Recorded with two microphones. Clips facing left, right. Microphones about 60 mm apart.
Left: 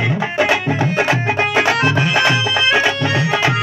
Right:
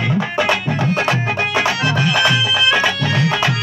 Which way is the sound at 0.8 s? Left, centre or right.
Left.